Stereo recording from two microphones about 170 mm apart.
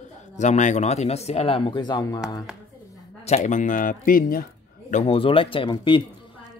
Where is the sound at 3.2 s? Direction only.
45° left (ahead or behind).